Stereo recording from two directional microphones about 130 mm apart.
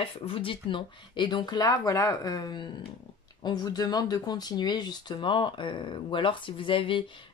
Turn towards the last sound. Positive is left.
turn(degrees=40)  # may be behind; listen again after turning